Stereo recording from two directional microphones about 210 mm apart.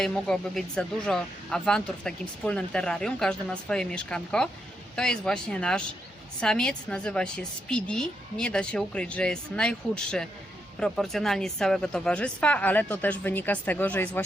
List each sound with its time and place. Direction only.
0.0 s speech: 5° left (ahead or behind)